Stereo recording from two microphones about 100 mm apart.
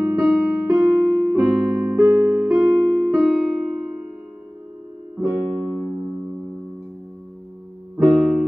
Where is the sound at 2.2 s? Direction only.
10° right (ahead or behind).